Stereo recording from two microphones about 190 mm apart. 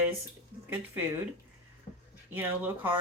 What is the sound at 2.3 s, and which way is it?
Speech, 10° right (ahead or behind).